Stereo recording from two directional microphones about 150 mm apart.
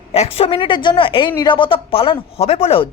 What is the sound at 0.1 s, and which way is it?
Speech, 40° left (ahead or behind).